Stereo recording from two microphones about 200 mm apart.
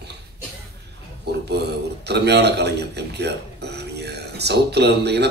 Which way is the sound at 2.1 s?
55° right (ahead or behind).